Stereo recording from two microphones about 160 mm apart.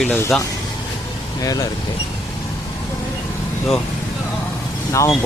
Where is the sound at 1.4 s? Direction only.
20° left (ahead or behind).